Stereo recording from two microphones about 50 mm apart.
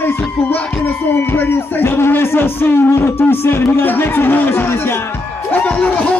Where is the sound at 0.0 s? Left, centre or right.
Left.